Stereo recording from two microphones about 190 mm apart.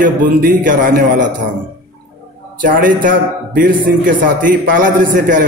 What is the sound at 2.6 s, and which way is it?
A man's voice, 45° right (ahead or behind).